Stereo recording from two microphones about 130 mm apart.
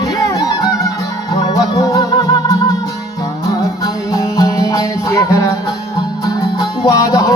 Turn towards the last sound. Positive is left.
turn(degrees=25)  # may be behind; listen again after turning